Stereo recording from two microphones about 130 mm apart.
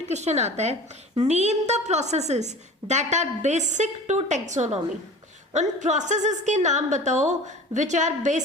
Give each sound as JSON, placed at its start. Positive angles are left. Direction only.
{"t": 0.1, "sound": "a woman's voice", "side_deg": -60}